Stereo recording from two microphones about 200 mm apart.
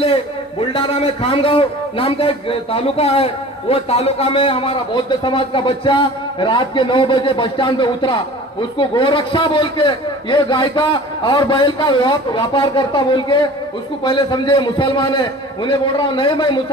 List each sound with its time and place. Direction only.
0.0 s a man's voice: 25° left (ahead or behind)